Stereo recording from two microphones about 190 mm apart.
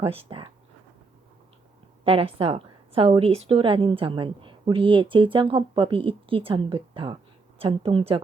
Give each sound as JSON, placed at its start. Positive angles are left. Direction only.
{"t": 0.0, "sound": "a woman's voice", "side_deg": -30}
{"t": 2.0, "sound": "a woman's voice", "side_deg": -30}